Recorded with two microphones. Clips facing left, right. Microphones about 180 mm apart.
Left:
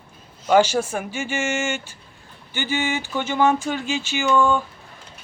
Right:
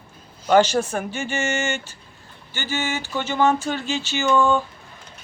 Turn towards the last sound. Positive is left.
turn(degrees=10)  # may be behind; listen again after turning